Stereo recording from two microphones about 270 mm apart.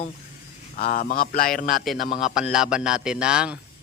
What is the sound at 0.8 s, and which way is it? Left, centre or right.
A man's voice, left.